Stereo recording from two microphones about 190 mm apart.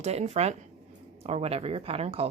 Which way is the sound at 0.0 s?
35° right (ahead or behind).